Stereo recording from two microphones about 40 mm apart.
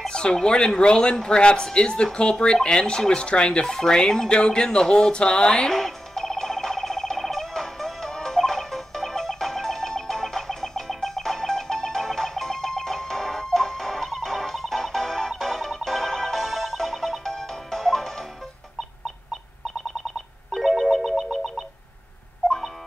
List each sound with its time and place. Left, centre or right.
0.1 s speech: left
5.8 s music: centre
20.5 s music: centre